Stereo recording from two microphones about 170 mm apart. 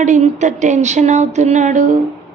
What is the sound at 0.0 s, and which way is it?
A woman's voice, 45° right (ahead or behind).